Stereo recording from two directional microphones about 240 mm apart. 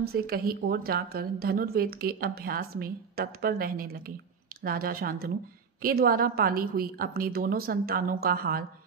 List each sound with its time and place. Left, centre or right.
0.0 s a woman's voice: right